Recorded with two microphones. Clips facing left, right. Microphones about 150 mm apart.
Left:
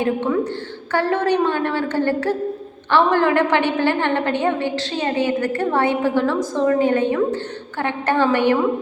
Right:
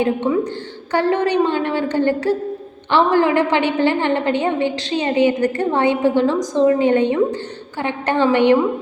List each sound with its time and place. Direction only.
0.0 s a woman's voice: 15° right (ahead or behind)